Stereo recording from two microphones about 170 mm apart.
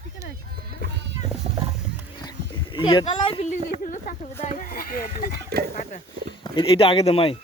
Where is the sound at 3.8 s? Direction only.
50° left (ahead or behind).